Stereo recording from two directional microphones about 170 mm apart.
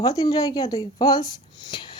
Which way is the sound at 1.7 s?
25° left (ahead or behind).